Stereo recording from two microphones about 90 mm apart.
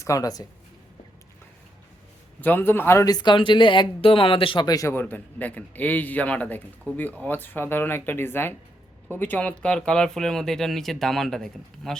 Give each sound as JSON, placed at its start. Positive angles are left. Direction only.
{"t": 0.0, "sound": "speech", "side_deg": 40}
{"t": 2.4, "sound": "a man's voice", "side_deg": 20}
{"t": 3.1, "sound": "speech", "side_deg": 55}
{"t": 4.6, "sound": "a man's voice", "side_deg": 45}
{"t": 4.9, "sound": "a man's voice", "side_deg": 20}